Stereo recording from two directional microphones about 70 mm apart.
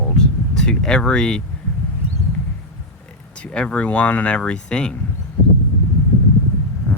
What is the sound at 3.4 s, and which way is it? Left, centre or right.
Speech, centre.